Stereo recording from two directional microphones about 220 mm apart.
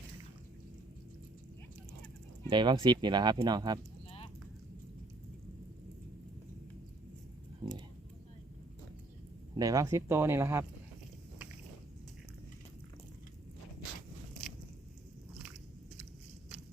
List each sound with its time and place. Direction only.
2.5 s speech: 20° right (ahead or behind)
7.6 s a sound: 20° right (ahead or behind)
9.6 s speech: 15° right (ahead or behind)